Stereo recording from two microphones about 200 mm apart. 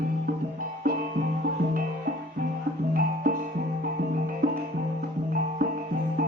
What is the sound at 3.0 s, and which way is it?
Music, 45° right (ahead or behind).